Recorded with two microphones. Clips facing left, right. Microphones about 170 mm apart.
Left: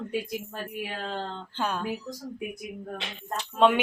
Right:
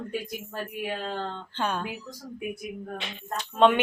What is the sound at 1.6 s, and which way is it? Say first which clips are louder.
Speech: right 1 dB; centre (ahead or behind).